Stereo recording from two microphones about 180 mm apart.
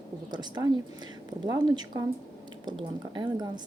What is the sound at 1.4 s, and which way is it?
Speech, 25° right (ahead or behind).